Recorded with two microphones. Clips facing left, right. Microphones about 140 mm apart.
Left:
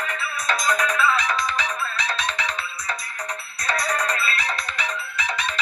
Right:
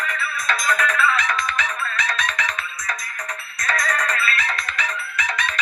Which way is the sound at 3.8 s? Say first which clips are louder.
Even; 10° left (ahead or behind).